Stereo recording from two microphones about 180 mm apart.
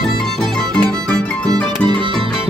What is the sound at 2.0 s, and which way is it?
Music, 25° right (ahead or behind).